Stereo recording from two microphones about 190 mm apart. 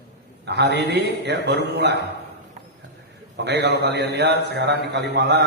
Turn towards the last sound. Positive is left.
turn(degrees=-65)  # may be behind; listen again after turning